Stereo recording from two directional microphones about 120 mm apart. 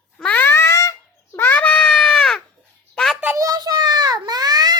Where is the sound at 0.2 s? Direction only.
15° left (ahead or behind).